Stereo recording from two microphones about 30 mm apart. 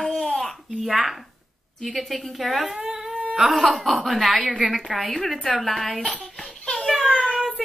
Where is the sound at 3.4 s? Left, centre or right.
Centre.